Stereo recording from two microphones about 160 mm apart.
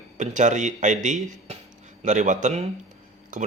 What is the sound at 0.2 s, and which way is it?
Speech, 50° right (ahead or behind).